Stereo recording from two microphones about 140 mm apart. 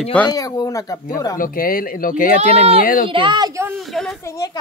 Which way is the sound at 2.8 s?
90° left.